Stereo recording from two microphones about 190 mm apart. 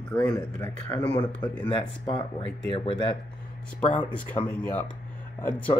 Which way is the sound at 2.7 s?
30° left (ahead or behind).